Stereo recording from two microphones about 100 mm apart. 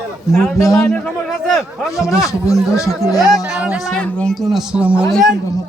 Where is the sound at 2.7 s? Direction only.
35° left (ahead or behind).